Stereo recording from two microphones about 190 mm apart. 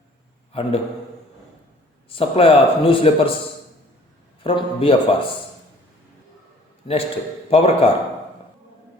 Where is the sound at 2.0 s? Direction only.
30° left (ahead or behind).